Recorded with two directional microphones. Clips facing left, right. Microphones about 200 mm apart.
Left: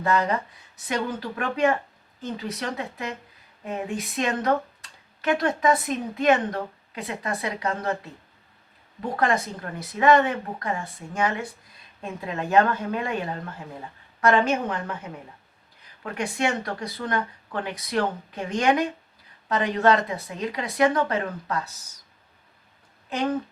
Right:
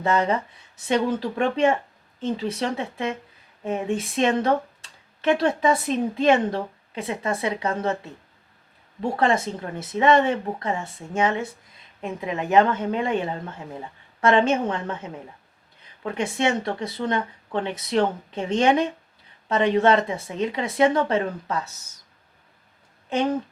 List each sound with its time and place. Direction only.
0.0 s speech: 25° right (ahead or behind)
9.1 s speech: 25° right (ahead or behind)
16.1 s speech: 25° right (ahead or behind)